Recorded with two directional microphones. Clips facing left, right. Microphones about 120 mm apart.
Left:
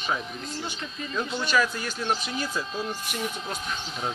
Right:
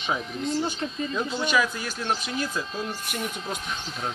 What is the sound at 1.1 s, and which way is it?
Speech, 15° right (ahead or behind).